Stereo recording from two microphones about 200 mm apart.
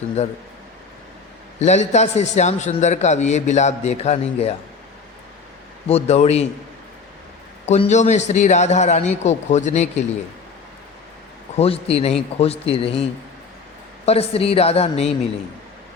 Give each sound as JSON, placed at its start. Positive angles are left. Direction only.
{"t": 0.2, "sound": "a man's voice", "side_deg": 30}
{"t": 1.5, "sound": "a man's voice", "side_deg": 35}
{"t": 5.9, "sound": "a man's voice", "side_deg": 30}
{"t": 7.7, "sound": "a man's voice", "side_deg": 35}
{"t": 11.5, "sound": "a man's voice", "side_deg": 30}